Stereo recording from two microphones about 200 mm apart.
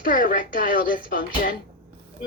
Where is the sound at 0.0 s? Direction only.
45° left (ahead or behind).